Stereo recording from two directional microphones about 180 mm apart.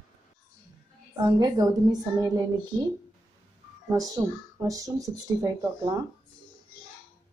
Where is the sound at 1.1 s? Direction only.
20° right (ahead or behind).